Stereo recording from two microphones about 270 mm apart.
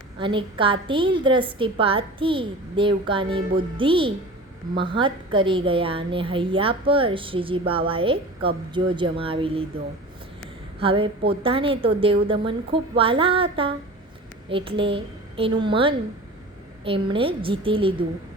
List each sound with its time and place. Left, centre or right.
0.2 s a woman's voice: centre
10.8 s a woman's voice: centre